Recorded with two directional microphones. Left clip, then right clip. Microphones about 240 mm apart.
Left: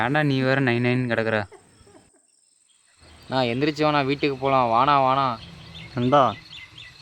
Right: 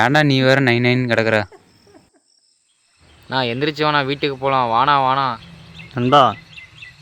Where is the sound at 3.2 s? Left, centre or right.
Centre.